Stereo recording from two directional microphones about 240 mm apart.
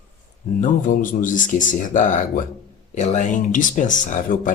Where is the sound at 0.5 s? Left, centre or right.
Left.